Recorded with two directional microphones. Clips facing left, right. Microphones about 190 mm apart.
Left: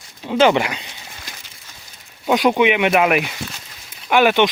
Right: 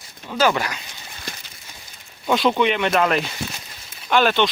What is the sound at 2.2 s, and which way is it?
Speech, 15° left (ahead or behind).